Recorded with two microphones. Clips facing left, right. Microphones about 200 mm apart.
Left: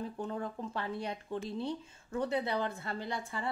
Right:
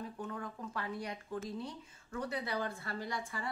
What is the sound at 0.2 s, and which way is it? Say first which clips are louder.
A woman's voice: left 5 dB; 30° left (ahead or behind).